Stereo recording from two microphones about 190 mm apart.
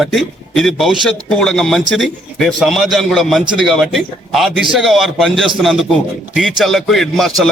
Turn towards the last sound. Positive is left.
turn(degrees=0)  # may be behind; listen again after turning